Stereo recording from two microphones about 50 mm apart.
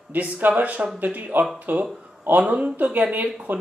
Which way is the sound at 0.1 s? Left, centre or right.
Right.